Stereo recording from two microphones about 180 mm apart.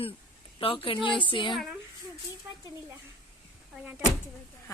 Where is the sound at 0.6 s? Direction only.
30° left (ahead or behind).